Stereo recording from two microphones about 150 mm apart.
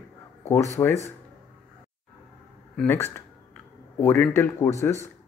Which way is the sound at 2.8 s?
15° left (ahead or behind).